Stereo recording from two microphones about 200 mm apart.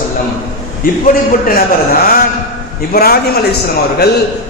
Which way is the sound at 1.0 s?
45° left (ahead or behind).